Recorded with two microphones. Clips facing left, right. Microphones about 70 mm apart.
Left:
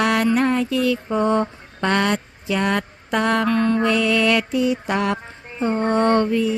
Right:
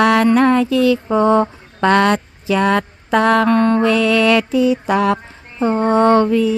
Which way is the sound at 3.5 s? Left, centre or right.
Right.